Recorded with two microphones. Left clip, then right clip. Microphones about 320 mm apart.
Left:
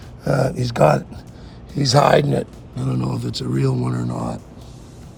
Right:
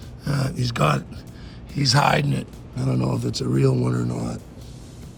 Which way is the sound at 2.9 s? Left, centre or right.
Centre.